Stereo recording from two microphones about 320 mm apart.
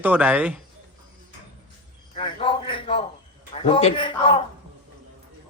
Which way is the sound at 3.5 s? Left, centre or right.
Centre.